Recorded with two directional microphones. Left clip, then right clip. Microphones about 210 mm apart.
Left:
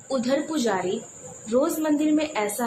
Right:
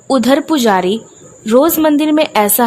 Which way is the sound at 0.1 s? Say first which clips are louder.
Right 13 dB; 55° right (ahead or behind).